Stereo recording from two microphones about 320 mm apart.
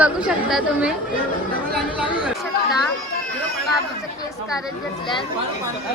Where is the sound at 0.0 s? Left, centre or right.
Centre.